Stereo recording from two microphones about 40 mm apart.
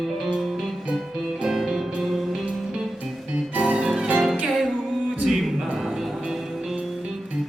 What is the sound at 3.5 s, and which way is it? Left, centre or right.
Music, right.